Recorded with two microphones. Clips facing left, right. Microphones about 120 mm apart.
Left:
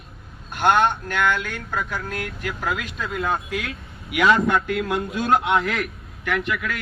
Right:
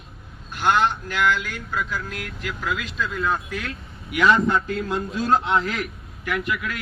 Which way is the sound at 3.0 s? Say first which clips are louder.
Right 2 dB; 60° left (ahead or behind).